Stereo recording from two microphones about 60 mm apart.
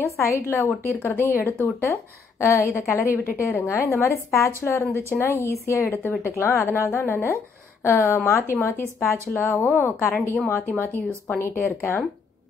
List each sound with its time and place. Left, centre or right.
0.2 s speech: left
0.8 s speech: left
9.3 s speech: left
11.3 s speech: left